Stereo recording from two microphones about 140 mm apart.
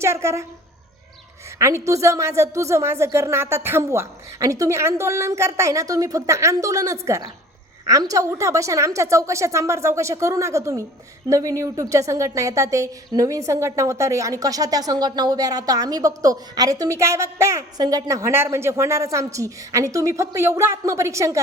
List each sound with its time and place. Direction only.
0.0 s a woman's voice: 20° right (ahead or behind)
1.5 s a woman's voice: 20° right (ahead or behind)